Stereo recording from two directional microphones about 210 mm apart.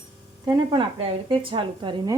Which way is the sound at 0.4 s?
20° right (ahead or behind).